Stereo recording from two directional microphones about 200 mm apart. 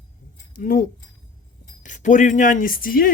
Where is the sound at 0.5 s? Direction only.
45° left (ahead or behind).